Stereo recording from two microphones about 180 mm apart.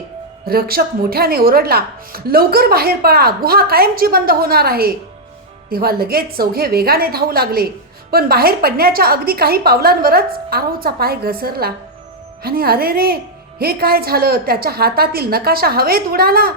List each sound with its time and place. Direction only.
0.4 s speech: 55° right (ahead or behind)